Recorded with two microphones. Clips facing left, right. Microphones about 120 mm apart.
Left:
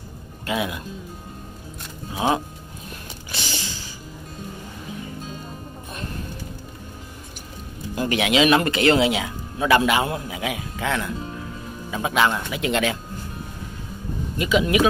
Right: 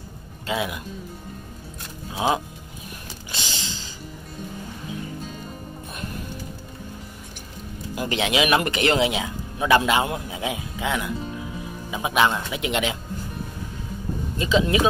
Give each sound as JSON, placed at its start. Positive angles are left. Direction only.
{"t": 2.2, "sound": "speech", "side_deg": -15}
{"t": 3.3, "sound": "a sound", "side_deg": -20}
{"t": 7.9, "sound": "speech", "side_deg": -15}
{"t": 14.4, "sound": "speech", "side_deg": -30}